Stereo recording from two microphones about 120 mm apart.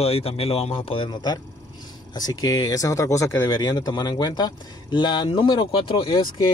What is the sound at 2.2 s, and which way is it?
Speech, 30° left (ahead or behind).